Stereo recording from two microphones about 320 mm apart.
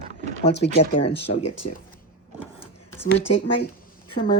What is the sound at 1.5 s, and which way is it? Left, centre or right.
Speech, left.